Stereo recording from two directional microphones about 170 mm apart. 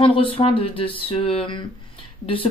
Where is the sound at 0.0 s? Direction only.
30° left (ahead or behind).